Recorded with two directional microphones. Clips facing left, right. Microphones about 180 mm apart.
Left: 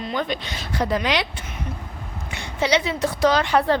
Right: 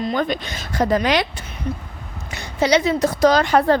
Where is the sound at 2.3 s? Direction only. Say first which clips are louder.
Right 4 dB; 40° right (ahead or behind).